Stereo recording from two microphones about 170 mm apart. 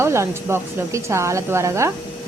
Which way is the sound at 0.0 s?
15° right (ahead or behind).